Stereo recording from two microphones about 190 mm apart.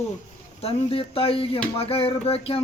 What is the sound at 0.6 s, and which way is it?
A woman's voice, 30° left (ahead or behind).